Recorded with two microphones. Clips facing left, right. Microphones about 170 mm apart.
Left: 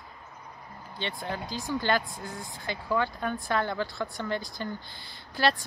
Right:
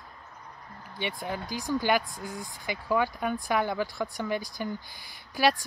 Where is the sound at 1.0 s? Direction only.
15° right (ahead or behind).